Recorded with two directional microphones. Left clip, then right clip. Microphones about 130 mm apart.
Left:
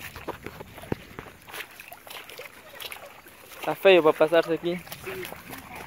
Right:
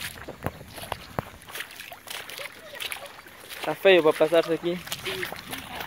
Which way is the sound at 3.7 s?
25° left (ahead or behind).